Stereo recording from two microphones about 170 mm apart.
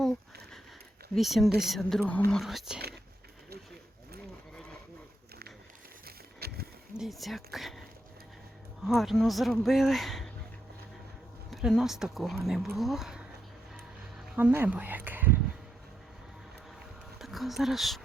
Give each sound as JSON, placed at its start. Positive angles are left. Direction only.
{"t": 1.1, "sound": "speech", "side_deg": 0}
{"t": 6.1, "sound": "a sound", "side_deg": -65}
{"t": 6.9, "sound": "speech", "side_deg": 0}
{"t": 8.9, "sound": "speech", "side_deg": 0}
{"t": 11.5, "sound": "speech", "side_deg": 0}
{"t": 14.3, "sound": "speech", "side_deg": -10}
{"t": 17.2, "sound": "speech", "side_deg": 0}